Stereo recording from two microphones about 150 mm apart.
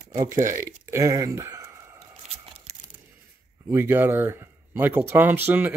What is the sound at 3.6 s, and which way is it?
Speech, 15° right (ahead or behind).